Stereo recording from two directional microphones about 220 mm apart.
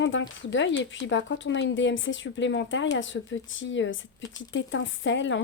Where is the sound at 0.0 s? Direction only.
55° left (ahead or behind).